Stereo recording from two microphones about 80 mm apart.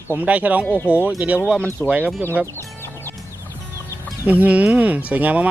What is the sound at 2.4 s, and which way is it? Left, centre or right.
Speech, right.